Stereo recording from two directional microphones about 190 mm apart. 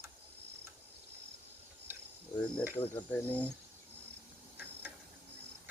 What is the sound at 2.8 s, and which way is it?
Speech, 10° left (ahead or behind).